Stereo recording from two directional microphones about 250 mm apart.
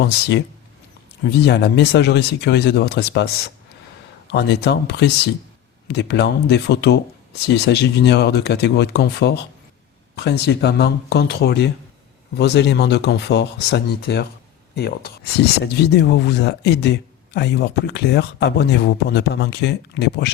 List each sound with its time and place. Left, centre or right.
1.5 s speech: left
4.3 s speech: left